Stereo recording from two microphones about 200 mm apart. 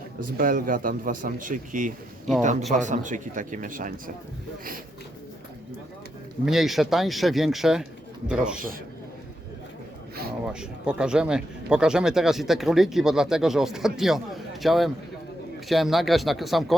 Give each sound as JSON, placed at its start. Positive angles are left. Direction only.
{"t": 0.3, "sound": "a man's voice", "side_deg": -45}
{"t": 6.4, "sound": "speech", "side_deg": 0}
{"t": 10.4, "sound": "speech", "side_deg": -5}